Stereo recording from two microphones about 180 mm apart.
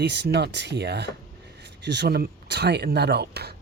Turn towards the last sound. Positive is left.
turn(degrees=-65)  # may be behind; listen again after turning